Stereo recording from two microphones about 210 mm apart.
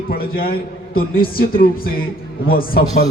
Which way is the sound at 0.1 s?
45° left (ahead or behind).